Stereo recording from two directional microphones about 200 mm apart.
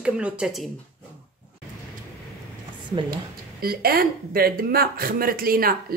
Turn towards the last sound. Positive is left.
turn(degrees=-45)  # may be behind; listen again after turning